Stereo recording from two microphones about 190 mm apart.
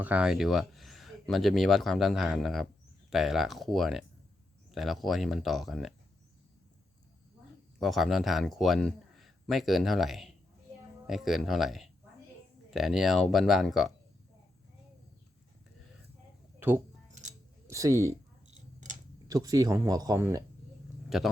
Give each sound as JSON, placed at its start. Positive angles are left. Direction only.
{"t": 0.0, "sound": "speech", "side_deg": -5}
{"t": 7.8, "sound": "a man's voice", "side_deg": 0}
{"t": 16.6, "sound": "speech", "side_deg": -10}
{"t": 19.3, "sound": "speech", "side_deg": -20}
{"t": 21.1, "sound": "speech", "side_deg": 0}